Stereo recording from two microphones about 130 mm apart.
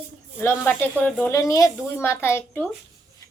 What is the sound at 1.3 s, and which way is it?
Speech, 25° left (ahead or behind).